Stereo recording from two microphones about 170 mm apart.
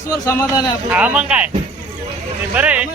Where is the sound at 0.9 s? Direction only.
10° right (ahead or behind).